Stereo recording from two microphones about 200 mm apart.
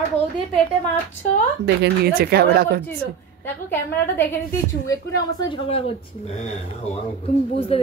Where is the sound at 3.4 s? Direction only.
10° left (ahead or behind).